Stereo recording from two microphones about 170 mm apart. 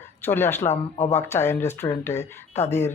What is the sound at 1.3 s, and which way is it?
Speech, 15° left (ahead or behind).